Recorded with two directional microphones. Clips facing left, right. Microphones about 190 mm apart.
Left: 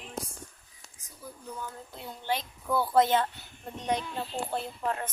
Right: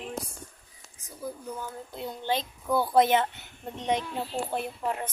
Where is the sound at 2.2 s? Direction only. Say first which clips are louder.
Right 2 dB; 20° right (ahead or behind).